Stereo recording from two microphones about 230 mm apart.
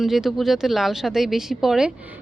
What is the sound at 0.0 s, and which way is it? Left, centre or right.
Speech, centre.